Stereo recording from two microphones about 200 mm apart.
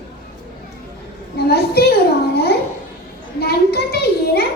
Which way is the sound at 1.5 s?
50° left (ahead or behind).